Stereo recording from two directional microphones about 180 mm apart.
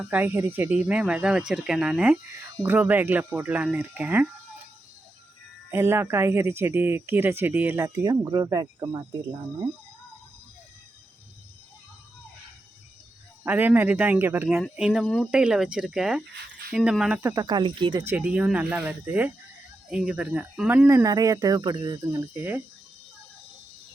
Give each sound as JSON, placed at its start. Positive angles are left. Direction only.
{"t": 0.0, "sound": "speech", "side_deg": -10}
{"t": 5.7, "sound": "speech", "side_deg": -15}
{"t": 13.4, "sound": "speech", "side_deg": -10}
{"t": 17.2, "sound": "speech", "side_deg": -20}
{"t": 18.0, "sound": "speech", "side_deg": -10}